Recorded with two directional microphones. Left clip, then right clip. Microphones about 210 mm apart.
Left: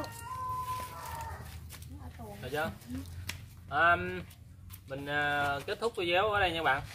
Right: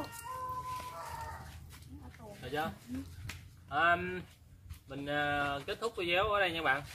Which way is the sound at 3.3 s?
50° left (ahead or behind).